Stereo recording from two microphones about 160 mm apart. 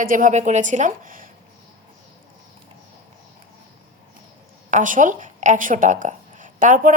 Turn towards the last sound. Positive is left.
turn(degrees=-55)  # may be behind; listen again after turning